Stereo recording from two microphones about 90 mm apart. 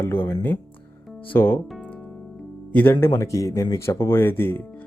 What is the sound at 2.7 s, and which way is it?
Speech, 25° left (ahead or behind).